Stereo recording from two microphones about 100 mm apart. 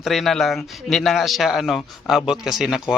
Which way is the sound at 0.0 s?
Centre (ahead or behind).